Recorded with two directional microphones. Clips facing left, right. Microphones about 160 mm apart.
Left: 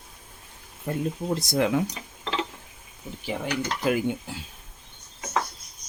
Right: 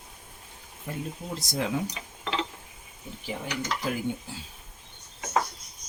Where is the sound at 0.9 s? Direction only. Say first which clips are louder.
Left 6 dB; 50° left (ahead or behind).